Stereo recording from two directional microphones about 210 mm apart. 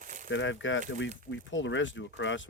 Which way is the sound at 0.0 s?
40° right (ahead or behind).